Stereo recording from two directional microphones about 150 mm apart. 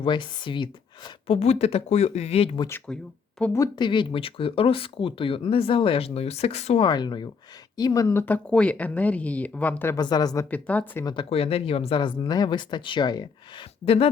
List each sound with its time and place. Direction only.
0.0 s speech: 30° left (ahead or behind)
1.4 s speech: 45° left (ahead or behind)
2.8 s speech: 5° left (ahead or behind)
3.8 s speech: 30° left (ahead or behind)
6.8 s speech: 30° left (ahead or behind); by 10.0 s 15° left (ahead or behind)
10.0 s speech: 25° left (ahead or behind)
10.5 s speech: 10° left (ahead or behind)
11.0 s speech: 35° left (ahead or behind)